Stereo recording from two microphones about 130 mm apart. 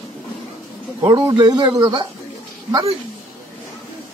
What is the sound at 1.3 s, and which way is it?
Speech, 35° right (ahead or behind).